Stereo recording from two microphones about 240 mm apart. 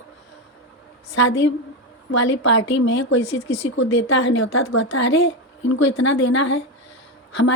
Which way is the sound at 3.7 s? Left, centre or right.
Left.